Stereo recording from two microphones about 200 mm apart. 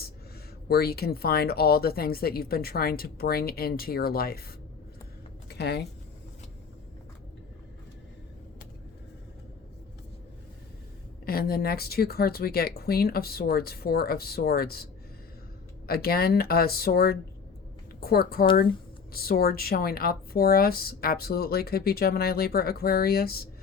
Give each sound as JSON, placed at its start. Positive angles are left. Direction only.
{"t": 0.7, "sound": "a woman's voice", "side_deg": 50}
{"t": 5.5, "sound": "a sound", "side_deg": 55}
{"t": 11.3, "sound": "a woman's voice", "side_deg": 50}
{"t": 15.9, "sound": "a woman's voice", "side_deg": 50}